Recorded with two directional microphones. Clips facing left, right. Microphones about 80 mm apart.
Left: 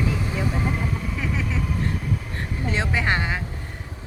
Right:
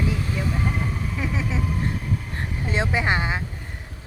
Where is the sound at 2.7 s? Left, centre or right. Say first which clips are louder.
Right 1 dB; centre.